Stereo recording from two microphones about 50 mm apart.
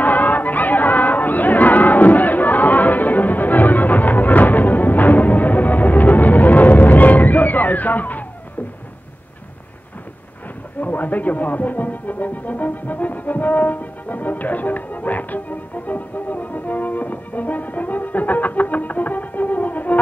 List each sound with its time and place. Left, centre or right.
0.0 s chatter: left
10.8 s music: left